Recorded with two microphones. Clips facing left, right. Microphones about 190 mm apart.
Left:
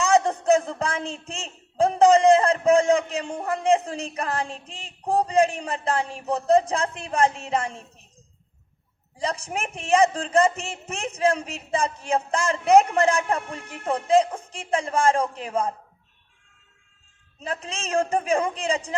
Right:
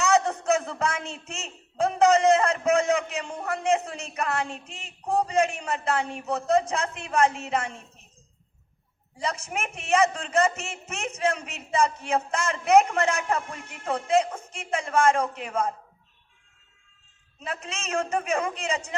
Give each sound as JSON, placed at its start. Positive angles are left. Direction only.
{"t": 0.0, "sound": "a man's voice", "side_deg": 35}
{"t": 9.1, "sound": "a man's voice", "side_deg": 35}
{"t": 17.4, "sound": "a man's voice", "side_deg": 35}